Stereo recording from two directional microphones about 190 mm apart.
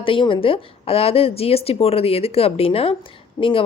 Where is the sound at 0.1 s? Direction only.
25° left (ahead or behind).